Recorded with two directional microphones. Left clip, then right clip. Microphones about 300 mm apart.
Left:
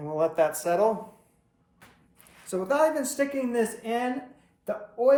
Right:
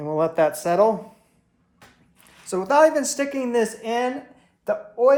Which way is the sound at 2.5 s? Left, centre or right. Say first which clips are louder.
Right 7 dB; right.